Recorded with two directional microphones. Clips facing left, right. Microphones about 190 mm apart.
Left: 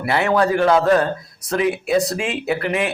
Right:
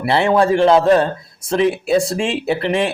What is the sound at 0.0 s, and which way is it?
A man's voice, 30° right (ahead or behind).